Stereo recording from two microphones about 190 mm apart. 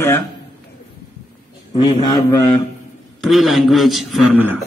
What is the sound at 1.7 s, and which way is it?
Speech, 20° left (ahead or behind).